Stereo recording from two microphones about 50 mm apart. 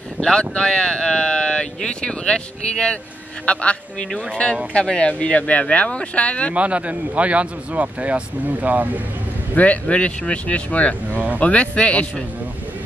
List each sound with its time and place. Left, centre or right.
0.2 s speech: centre
4.7 s speech: left
6.5 s a man's voice: right
9.6 s speech: left